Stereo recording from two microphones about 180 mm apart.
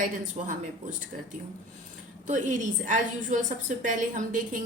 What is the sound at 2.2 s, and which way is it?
A woman's voice, 45° right (ahead or behind).